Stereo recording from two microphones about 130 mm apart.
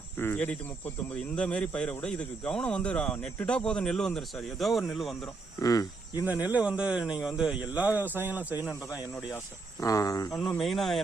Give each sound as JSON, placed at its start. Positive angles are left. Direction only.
{"t": 0.2, "sound": "speech", "side_deg": 15}
{"t": 5.5, "sound": "speech", "side_deg": 25}
{"t": 6.4, "sound": "speech", "side_deg": -10}
{"t": 9.8, "sound": "speech", "side_deg": 25}
{"t": 10.6, "sound": "speech", "side_deg": 0}